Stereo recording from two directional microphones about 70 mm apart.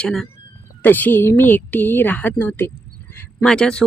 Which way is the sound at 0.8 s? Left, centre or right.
Left.